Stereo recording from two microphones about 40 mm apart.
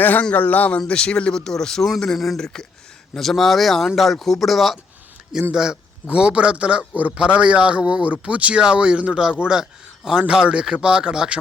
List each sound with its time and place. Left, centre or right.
0.3 s speech: left
0.9 s speech: left
1.4 s speech: centre
5.3 s a man's voice: centre
6.1 s a man's voice: right
8.6 s a man's voice: right